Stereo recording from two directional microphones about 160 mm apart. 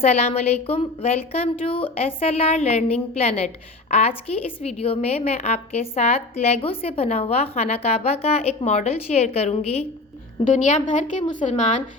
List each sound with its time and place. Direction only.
0.0 s a woman's voice: 40° left (ahead or behind)